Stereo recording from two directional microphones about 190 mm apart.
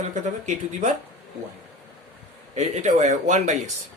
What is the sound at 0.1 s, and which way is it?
Speech, 40° right (ahead or behind).